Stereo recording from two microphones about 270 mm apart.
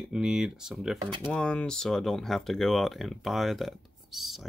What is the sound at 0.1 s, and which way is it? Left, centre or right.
Speech, centre.